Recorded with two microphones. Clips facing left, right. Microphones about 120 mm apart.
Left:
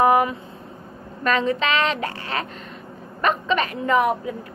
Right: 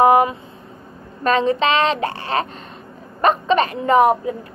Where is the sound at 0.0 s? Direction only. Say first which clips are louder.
Right 4 dB; 25° right (ahead or behind).